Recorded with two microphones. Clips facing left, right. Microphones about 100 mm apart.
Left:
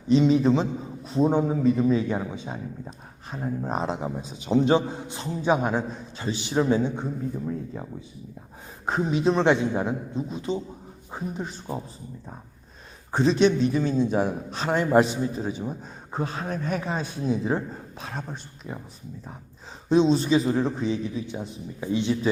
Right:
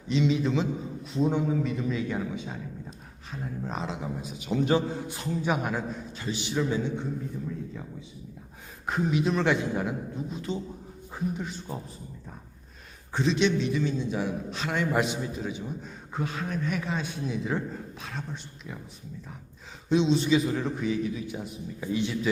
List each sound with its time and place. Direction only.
0.1 s a man's voice: 40° left (ahead or behind)
8.9 s a man's voice: 30° left (ahead or behind)
11.1 s speech: 35° left (ahead or behind)
13.1 s a man's voice: 40° left (ahead or behind)
19.9 s a man's voice: 40° left (ahead or behind)